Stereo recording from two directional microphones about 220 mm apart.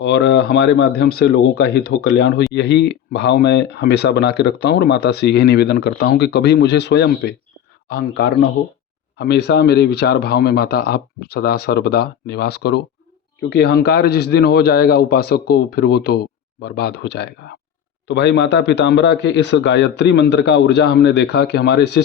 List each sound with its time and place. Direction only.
0.0 s speech: 50° left (ahead or behind)